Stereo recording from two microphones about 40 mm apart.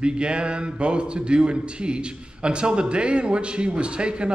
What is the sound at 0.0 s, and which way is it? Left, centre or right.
A man's voice, right.